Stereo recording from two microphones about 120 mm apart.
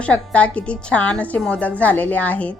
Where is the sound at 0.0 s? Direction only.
10° left (ahead or behind).